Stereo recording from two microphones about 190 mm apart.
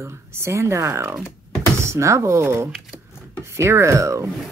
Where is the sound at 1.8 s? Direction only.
15° right (ahead or behind).